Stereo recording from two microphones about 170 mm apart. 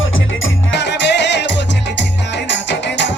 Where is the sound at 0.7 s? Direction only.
90° left.